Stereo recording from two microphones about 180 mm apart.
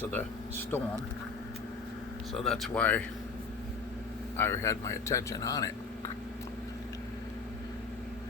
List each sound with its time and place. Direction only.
2.3 s speech: centre (ahead or behind)
4.4 s speech: 15° left (ahead or behind)